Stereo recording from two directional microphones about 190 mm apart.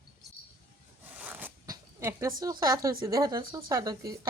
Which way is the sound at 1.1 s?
10° right (ahead or behind).